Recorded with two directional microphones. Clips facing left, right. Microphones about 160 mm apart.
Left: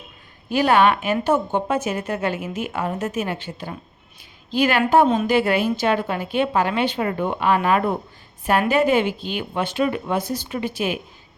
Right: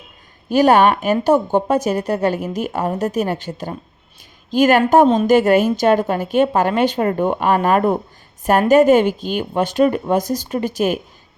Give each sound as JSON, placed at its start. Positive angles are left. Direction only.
{"t": 0.5, "sound": "a woman's voice", "side_deg": -40}